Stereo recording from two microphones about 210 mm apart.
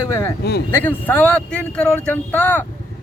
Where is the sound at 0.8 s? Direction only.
10° left (ahead or behind).